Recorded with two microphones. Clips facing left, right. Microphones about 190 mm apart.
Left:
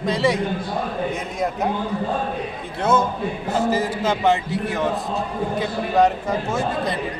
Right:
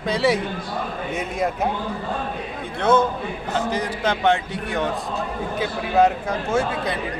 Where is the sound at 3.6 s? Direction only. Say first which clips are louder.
Left 3 dB; 5° left (ahead or behind).